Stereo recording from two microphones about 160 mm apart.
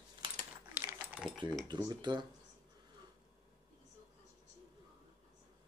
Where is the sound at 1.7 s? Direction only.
30° right (ahead or behind).